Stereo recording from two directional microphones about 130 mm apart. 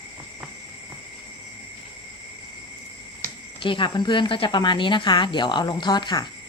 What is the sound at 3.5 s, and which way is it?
Speech, 40° left (ahead or behind).